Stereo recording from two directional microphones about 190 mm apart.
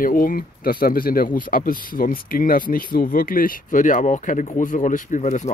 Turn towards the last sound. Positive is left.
turn(degrees=40)  # may be behind; listen again after turning